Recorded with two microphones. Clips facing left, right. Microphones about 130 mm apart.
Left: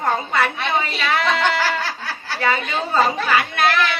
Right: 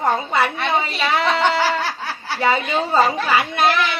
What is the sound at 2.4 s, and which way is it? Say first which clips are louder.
A woman's voice: right 3 dB; 20° right (ahead or behind).